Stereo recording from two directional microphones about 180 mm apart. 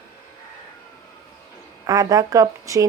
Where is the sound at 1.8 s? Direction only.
20° right (ahead or behind).